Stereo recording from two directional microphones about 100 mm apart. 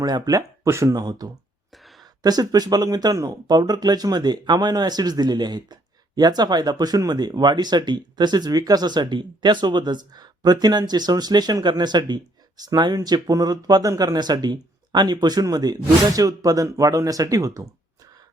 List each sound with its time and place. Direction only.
0.0 s speech: 40° right (ahead or behind)
0.9 s speech: 40° right (ahead or behind)